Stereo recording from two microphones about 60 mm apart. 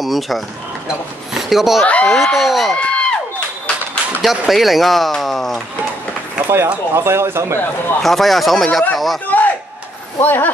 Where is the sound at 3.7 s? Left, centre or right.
Centre.